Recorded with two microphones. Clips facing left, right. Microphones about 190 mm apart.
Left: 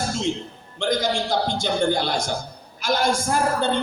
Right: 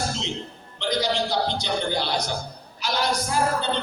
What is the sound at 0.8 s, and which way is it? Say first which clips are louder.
A woman's voice: left 2 dB; 50° left (ahead or behind).